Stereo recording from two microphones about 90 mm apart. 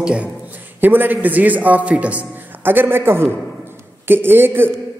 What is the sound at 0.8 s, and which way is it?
A man's voice, 20° right (ahead or behind).